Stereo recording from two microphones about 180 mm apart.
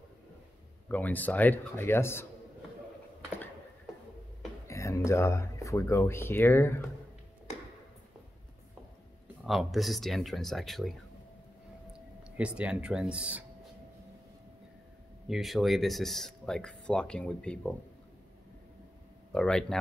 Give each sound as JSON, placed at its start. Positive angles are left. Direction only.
{"t": 0.8, "sound": "speech", "side_deg": 10}
{"t": 4.6, "sound": "speech", "side_deg": 15}
{"t": 9.4, "sound": "speech", "side_deg": 0}
{"t": 11.9, "sound": "speech", "side_deg": -5}
{"t": 15.2, "sound": "speech", "side_deg": 0}
{"t": 19.3, "sound": "speech", "side_deg": 5}